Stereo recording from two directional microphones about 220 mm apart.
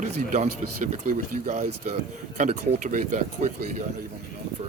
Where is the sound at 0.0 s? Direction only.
30° right (ahead or behind).